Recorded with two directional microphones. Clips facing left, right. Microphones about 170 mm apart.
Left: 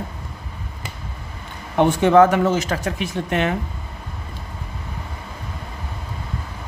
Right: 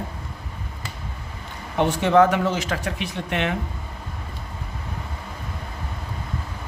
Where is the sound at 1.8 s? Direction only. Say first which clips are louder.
Left 4 dB; 50° left (ahead or behind).